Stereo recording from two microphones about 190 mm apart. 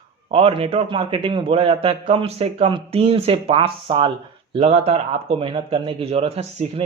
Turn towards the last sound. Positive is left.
turn(degrees=-35)  # may be behind; listen again after turning